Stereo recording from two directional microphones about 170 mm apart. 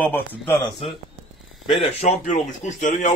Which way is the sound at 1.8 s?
45° left (ahead or behind).